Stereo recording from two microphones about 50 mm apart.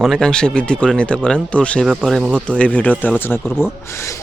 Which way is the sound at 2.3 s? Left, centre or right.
Left.